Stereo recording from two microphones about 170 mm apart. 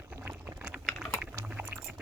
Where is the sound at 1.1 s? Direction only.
10° right (ahead or behind).